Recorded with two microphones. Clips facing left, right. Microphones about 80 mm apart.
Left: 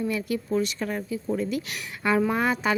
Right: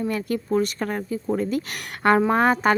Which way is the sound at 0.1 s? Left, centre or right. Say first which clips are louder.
Right 3 dB; right.